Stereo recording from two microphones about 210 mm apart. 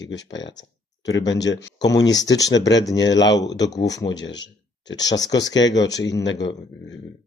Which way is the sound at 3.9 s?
15° left (ahead or behind).